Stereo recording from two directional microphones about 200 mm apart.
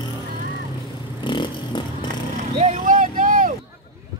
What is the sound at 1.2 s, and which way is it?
Vehicle, 25° left (ahead or behind).